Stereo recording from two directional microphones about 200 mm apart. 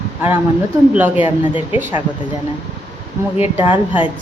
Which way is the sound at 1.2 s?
25° left (ahead or behind).